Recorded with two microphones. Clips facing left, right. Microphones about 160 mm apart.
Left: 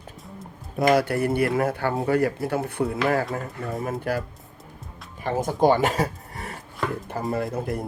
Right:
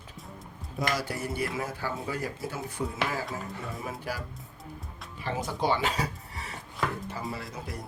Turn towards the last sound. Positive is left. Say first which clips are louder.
# left 12 dB
turn(degrees=55)  # may be behind; listen again after turning